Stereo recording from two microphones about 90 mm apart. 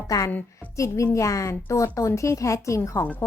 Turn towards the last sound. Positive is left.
turn(degrees=35)  # may be behind; listen again after turning